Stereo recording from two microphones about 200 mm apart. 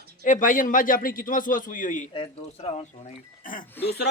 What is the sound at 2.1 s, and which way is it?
Speech, 25° left (ahead or behind).